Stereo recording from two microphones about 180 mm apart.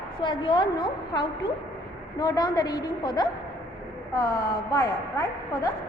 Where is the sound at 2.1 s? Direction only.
20° left (ahead or behind).